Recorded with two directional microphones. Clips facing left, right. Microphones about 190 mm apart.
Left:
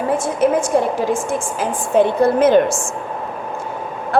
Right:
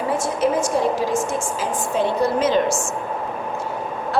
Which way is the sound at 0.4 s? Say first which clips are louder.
Left 4 dB; 55° left (ahead or behind).